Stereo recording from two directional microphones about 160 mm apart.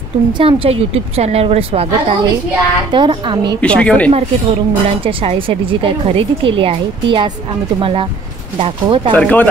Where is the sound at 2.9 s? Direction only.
30° right (ahead or behind).